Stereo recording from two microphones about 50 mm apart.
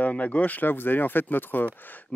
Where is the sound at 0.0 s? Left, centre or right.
Left.